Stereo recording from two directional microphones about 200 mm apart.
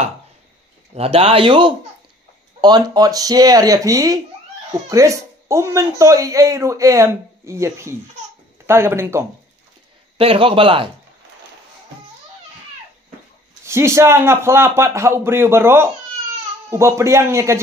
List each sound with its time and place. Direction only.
0.9 s a man's voice: 30° right (ahead or behind); by 9.2 s 10° right (ahead or behind)
10.1 s a man's voice: 25° right (ahead or behind)
13.7 s speech: 15° right (ahead or behind)